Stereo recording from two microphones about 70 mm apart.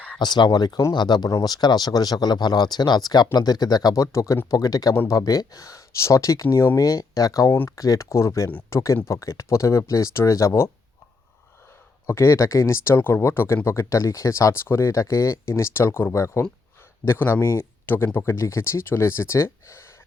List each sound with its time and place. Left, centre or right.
0.2 s speech: left
1.5 s speech: left
6.7 s speech: left
12.0 s speech: left